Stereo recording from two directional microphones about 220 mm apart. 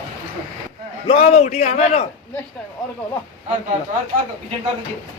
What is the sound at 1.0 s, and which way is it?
A man's voice, 30° left (ahead or behind).